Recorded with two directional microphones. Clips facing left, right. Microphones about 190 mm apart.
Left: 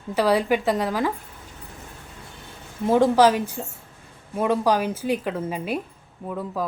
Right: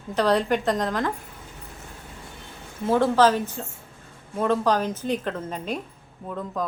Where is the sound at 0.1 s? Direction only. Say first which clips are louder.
Left 1 dB; 5° left (ahead or behind).